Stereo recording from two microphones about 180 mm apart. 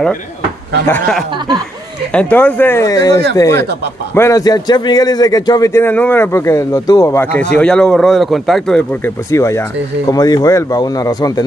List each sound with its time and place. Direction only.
0.8 s a man's voice: 5° left (ahead or behind)
9.3 s a man's voice: 15° left (ahead or behind)